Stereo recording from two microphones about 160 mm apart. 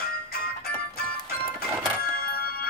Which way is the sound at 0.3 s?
70° left (ahead or behind).